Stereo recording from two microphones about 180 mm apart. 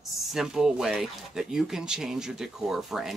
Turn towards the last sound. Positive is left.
turn(degrees=0)  # may be behind; listen again after turning